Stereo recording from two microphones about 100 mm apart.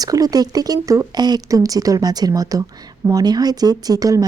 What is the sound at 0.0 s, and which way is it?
Speech, 40° right (ahead or behind).